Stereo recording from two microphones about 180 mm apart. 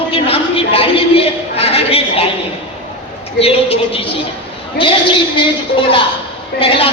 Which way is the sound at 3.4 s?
30° left (ahead or behind).